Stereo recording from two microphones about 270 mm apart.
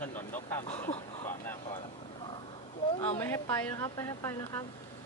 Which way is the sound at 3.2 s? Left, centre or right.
Centre.